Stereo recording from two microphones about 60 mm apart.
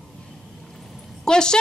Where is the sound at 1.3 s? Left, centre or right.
Centre.